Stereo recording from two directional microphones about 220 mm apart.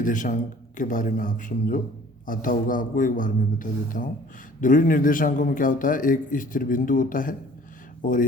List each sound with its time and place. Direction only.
0.0 s a man's voice: 35° left (ahead or behind)